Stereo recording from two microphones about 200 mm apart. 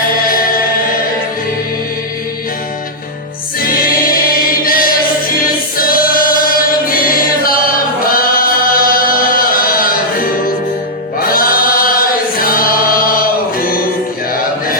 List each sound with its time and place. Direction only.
0.3 s music: 45° left (ahead or behind)
4.6 s choir: 45° left (ahead or behind)
8.1 s a sound: 45° left (ahead or behind)
11.2 s chant: 45° left (ahead or behind)